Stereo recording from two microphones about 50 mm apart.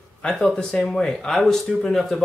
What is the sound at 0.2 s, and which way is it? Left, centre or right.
Speech, centre.